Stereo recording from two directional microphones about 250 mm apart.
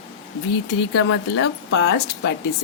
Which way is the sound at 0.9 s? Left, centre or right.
Left.